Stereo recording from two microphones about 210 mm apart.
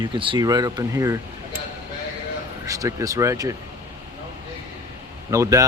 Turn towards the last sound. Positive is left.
turn(degrees=-15)  # may be behind; listen again after turning